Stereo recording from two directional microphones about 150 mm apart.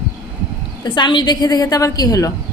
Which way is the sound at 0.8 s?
30° left (ahead or behind).